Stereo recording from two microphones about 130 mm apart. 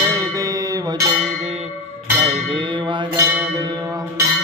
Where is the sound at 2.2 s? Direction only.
40° right (ahead or behind).